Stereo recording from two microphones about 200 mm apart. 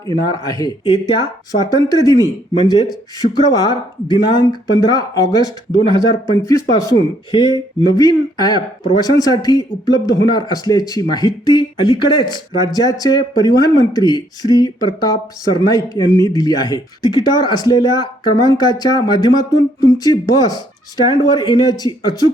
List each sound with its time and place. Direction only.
0.1 s speech: 20° left (ahead or behind)